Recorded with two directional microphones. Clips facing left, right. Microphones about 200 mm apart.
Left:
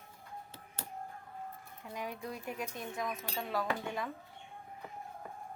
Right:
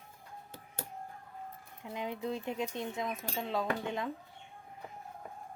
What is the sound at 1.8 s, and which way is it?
Speech, 20° right (ahead or behind).